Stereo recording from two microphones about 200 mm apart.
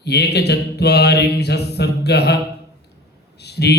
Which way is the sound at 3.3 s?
55° left (ahead or behind).